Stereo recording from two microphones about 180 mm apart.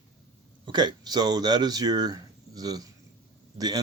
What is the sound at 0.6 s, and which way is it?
Speech, 25° right (ahead or behind).